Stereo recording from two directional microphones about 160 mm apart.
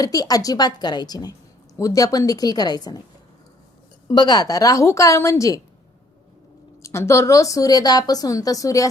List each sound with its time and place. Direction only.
0.0 s a woman's voice: 25° left (ahead or behind)
4.1 s a woman's voice: 25° left (ahead or behind)
6.8 s a woman's voice: 15° left (ahead or behind)